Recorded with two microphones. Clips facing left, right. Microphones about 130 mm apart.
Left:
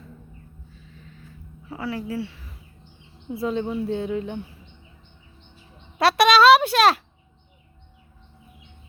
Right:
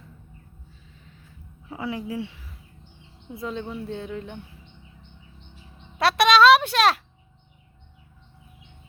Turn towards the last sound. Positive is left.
turn(degrees=0)  # may be behind; listen again after turning